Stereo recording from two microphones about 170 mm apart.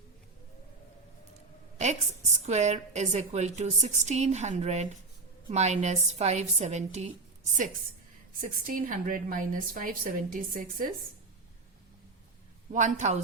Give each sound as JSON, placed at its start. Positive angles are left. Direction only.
{"t": 1.8, "sound": "a woman's voice", "side_deg": -45}
{"t": 12.7, "sound": "a woman's voice", "side_deg": -45}